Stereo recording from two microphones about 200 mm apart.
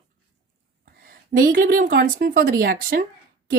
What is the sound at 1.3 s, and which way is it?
Speech, 45° right (ahead or behind).